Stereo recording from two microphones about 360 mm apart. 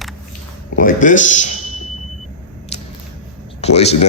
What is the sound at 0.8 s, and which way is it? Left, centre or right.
Speech, left.